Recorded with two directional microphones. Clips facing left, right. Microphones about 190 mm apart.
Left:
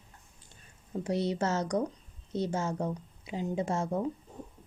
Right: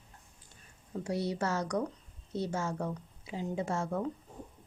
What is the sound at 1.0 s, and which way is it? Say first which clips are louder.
Speech: left 3 dB; 20° left (ahead or behind).